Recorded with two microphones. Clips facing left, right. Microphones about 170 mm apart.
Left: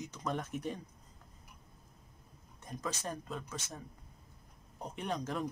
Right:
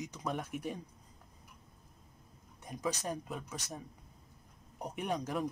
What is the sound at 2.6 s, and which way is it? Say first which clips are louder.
Speech: right 3 dB; 10° right (ahead or behind).